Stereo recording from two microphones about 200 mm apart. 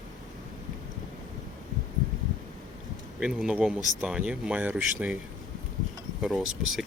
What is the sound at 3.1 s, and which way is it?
Speech, 5° right (ahead or behind).